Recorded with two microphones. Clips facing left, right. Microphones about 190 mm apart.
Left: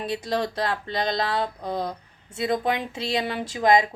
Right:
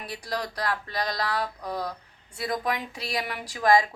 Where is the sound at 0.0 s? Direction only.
25° left (ahead or behind).